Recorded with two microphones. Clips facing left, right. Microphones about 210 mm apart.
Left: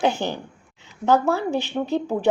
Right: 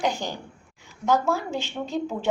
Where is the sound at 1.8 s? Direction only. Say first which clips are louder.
Left 6 dB; 65° left (ahead or behind).